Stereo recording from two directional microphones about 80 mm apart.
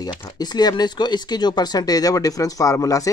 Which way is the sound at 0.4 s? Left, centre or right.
Left.